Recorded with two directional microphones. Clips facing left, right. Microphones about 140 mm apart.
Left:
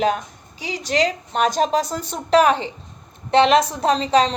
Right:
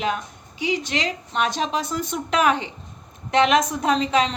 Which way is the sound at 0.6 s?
35° left (ahead or behind).